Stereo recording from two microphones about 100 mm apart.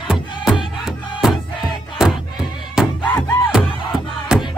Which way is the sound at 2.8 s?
5° right (ahead or behind).